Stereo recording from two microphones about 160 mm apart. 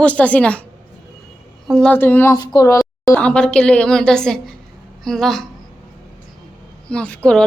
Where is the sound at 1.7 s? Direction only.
5° left (ahead or behind); by 3.1 s 20° left (ahead or behind).